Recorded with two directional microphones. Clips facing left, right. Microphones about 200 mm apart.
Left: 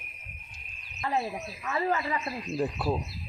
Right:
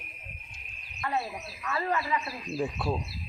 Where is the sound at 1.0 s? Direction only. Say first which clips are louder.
Left 2 dB; 25° left (ahead or behind).